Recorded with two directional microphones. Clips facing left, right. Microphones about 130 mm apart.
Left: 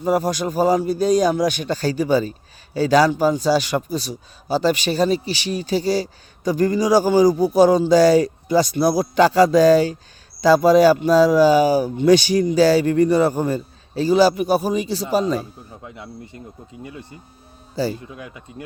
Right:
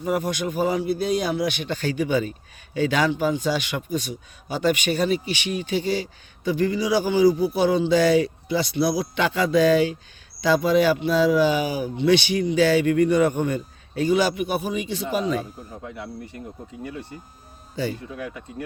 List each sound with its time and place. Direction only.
0.0 s a man's voice: 35° left (ahead or behind)
16.0 s speech: 20° left (ahead or behind)
17.8 s a man's voice: 35° left (ahead or behind)